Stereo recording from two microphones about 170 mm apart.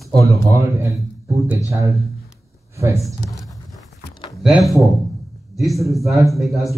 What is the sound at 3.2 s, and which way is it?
Speech, 20° left (ahead or behind).